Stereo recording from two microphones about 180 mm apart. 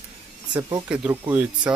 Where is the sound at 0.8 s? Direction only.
10° right (ahead or behind).